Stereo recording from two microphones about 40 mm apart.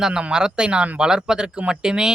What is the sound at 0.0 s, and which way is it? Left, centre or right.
Speech, right.